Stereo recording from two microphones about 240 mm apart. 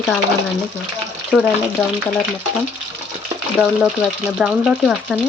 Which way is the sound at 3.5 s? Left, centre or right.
Centre.